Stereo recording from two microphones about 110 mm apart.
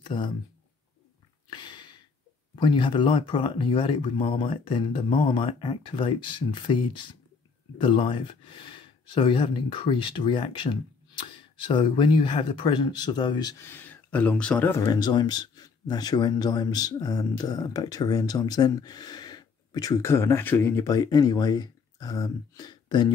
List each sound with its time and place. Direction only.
0.0 s speech: 45° left (ahead or behind)
1.5 s a sound: 45° left (ahead or behind)
2.5 s speech: 45° left (ahead or behind)
13.6 s speech: 20° left (ahead or behind)
14.9 s speech: 40° left (ahead or behind)